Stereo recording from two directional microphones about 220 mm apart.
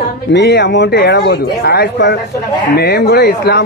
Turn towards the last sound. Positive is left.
turn(degrees=45)  # may be behind; listen again after turning